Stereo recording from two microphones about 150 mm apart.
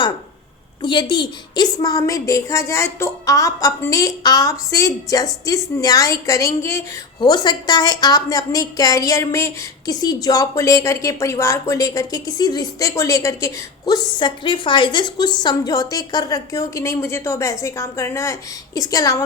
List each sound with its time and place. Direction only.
0.8 s a woman's voice: 30° left (ahead or behind)